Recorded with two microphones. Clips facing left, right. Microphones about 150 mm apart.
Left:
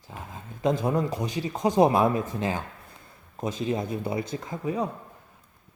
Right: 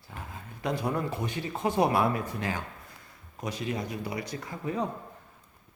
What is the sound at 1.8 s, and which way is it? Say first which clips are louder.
Speech: left 5 dB; 20° left (ahead or behind).